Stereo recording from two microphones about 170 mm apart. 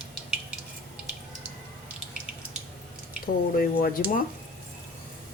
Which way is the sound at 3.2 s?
60° left (ahead or behind).